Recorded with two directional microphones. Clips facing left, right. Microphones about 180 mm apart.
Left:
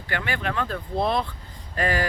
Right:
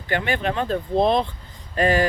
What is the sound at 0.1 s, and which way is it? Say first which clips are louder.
Speech: right 5 dB; 20° right (ahead or behind).